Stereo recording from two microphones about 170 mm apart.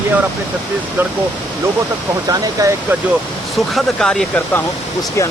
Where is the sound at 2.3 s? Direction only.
20° right (ahead or behind).